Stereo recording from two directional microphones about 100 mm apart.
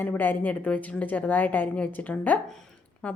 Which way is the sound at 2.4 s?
5° left (ahead or behind).